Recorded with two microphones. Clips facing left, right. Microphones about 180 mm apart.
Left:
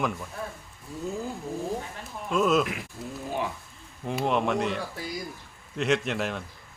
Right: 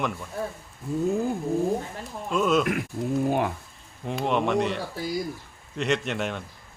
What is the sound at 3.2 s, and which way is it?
Speech, 55° right (ahead or behind).